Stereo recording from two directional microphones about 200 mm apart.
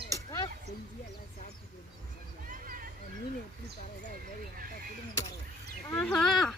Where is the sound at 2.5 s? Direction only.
45° right (ahead or behind).